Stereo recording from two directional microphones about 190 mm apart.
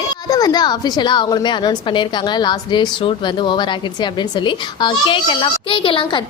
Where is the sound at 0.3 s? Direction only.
20° left (ahead or behind).